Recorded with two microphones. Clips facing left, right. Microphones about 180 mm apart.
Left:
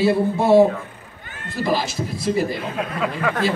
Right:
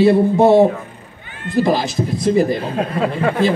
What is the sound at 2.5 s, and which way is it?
Speech, 35° right (ahead or behind).